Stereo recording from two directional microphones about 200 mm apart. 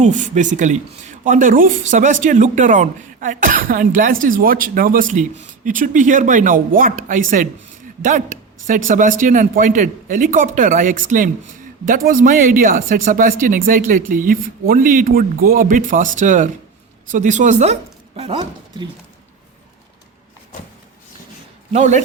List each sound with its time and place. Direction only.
0.0 s speech: 40° right (ahead or behind)
8.9 s speech: 40° right (ahead or behind)
21.7 s speech: 35° right (ahead or behind)